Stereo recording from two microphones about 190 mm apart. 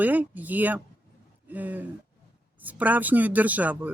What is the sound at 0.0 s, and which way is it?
Speech, 10° right (ahead or behind).